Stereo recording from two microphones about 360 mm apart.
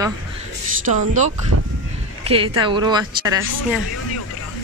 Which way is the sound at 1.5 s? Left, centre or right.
Right.